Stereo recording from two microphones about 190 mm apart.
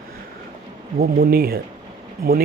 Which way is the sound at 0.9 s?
55° right (ahead or behind).